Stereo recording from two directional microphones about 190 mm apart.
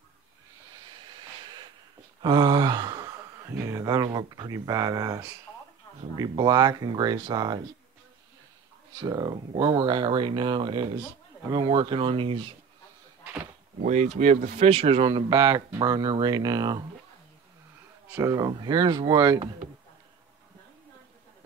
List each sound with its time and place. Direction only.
2.2 s speech: 25° right (ahead or behind)
9.0 s speech: 20° right (ahead or behind)
13.7 s speech: 35° right (ahead or behind); by 16.8 s 20° right (ahead or behind)
18.1 s speech: 15° right (ahead or behind)